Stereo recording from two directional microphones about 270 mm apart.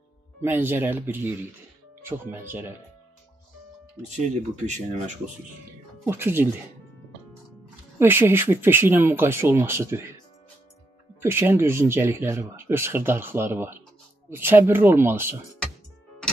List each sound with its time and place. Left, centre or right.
0.4 s speech: centre
4.6 s speech: right
6.0 s speech: centre
8.0 s speech: centre
11.1 s speech: centre